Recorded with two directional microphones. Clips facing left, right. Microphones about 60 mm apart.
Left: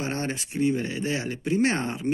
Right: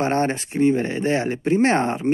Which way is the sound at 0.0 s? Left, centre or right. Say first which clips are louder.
Right 9 dB; right.